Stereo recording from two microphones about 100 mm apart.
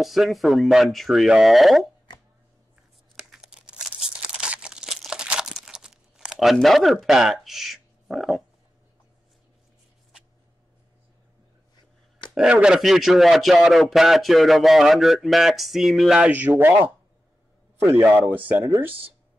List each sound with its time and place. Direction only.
0.0 s a man's voice: centre (ahead or behind)
3.2 s crumpling: 5° right (ahead or behind)
12.4 s a man's voice: 10° right (ahead or behind)
16.2 s a man's voice: 15° right (ahead or behind)